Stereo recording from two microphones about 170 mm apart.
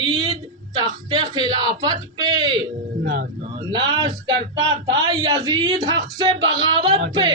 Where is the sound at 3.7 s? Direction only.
25° right (ahead or behind).